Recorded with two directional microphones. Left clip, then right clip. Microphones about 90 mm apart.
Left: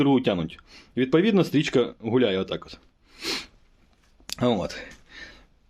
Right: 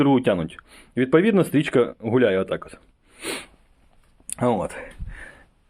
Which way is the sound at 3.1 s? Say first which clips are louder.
Left 1 dB; 35° left (ahead or behind).